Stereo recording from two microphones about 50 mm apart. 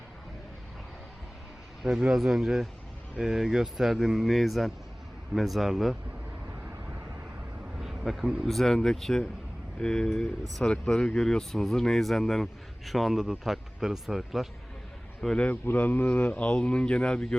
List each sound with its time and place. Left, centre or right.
1.8 s speech: centre
7.8 s a sound: centre
8.4 s speech: centre
10.2 s speech: centre
15.6 s speech: left
16.4 s speech: left